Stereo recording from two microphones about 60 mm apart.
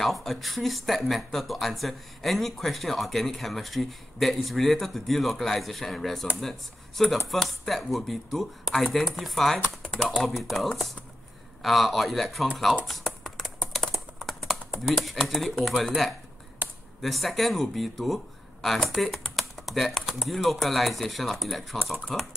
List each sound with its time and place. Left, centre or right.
0.0 s speech: centre
7.2 s speech: centre
12.8 s computer keyboard: centre
15.5 s speech: centre
16.6 s computer keyboard: right
17.0 s speech: centre